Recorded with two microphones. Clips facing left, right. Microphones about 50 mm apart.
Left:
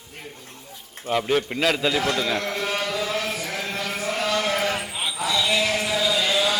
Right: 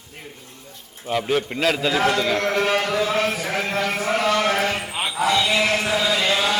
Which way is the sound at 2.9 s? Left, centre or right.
Right.